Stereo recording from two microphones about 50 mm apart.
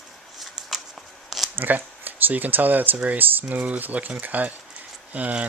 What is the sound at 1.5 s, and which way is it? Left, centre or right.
Speech, right.